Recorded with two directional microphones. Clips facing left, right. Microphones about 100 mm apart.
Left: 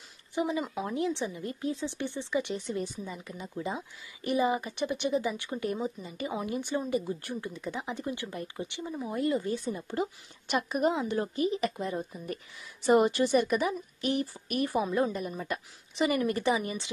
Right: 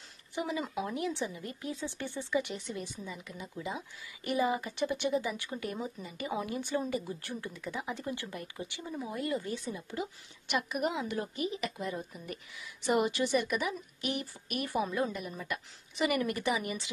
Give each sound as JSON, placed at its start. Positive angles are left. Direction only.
{"t": 0.3, "sound": "a woman's voice", "side_deg": 25}